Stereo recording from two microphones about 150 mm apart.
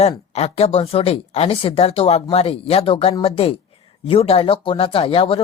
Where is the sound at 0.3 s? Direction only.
45° left (ahead or behind).